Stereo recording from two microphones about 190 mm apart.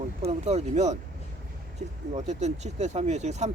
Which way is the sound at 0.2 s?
35° right (ahead or behind).